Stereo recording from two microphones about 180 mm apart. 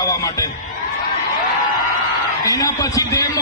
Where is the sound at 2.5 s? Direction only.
20° left (ahead or behind).